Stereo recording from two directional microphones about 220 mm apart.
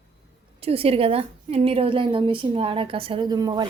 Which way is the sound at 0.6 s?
25° right (ahead or behind).